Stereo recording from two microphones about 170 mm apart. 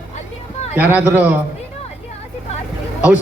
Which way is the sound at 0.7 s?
10° right (ahead or behind).